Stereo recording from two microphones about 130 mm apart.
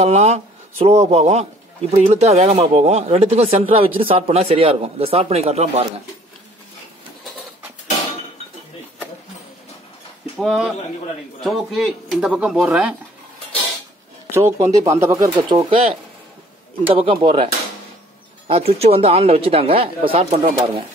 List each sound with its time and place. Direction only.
0.0 s a man's voice: 55° right (ahead or behind)
10.4 s speech: centre (ahead or behind)
14.3 s speech: 25° right (ahead or behind)
16.8 s a man's voice: 45° right (ahead or behind)
18.5 s a man's voice: 50° right (ahead or behind)